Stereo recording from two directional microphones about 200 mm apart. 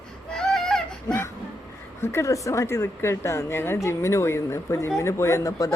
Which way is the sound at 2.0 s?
15° left (ahead or behind).